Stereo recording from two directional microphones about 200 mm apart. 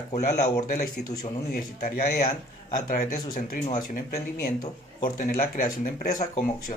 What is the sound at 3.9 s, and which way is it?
Speech, 50° left (ahead or behind).